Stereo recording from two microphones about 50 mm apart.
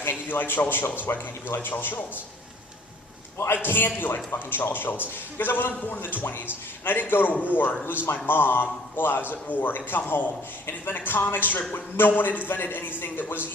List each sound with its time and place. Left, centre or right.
0.0 s a sound: left
0.7 s a man's voice: left
3.3 s a man's voice: left